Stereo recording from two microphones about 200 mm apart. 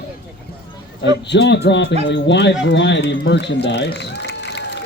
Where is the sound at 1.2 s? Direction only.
60° left (ahead or behind).